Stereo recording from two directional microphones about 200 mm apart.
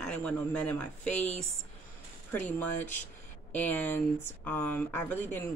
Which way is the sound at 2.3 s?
5° left (ahead or behind).